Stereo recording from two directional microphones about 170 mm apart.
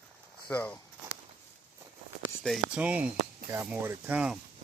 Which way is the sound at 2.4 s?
5° right (ahead or behind).